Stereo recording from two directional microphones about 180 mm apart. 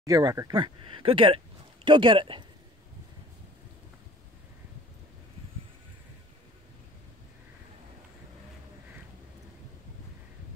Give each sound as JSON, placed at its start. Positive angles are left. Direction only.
{"t": 0.0, "sound": "speech", "side_deg": -20}